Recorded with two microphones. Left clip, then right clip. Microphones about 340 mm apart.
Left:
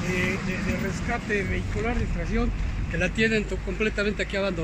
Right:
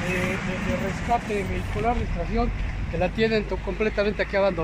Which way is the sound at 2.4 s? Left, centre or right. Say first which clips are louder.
Right 3 dB; centre.